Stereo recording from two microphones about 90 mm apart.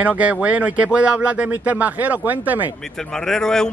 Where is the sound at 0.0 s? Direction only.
15° right (ahead or behind).